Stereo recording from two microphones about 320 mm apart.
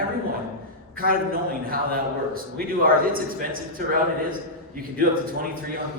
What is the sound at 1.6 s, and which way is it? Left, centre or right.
Speech, right.